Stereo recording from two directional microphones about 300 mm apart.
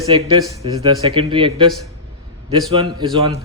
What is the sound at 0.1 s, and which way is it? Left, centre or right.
Speech, centre.